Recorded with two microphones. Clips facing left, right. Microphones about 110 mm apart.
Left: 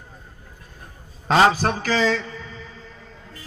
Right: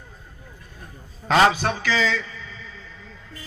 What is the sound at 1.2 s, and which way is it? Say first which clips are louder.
A man's voice: left 1 dB; 35° left (ahead or behind).